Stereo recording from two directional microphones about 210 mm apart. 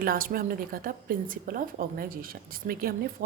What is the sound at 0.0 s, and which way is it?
A woman's voice, 45° right (ahead or behind).